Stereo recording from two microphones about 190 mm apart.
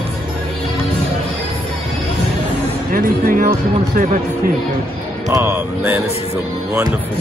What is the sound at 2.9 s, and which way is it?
Speech, 50° right (ahead or behind).